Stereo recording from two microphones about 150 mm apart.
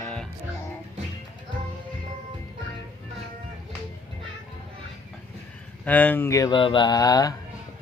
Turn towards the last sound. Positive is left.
turn(degrees=25)  # may be behind; listen again after turning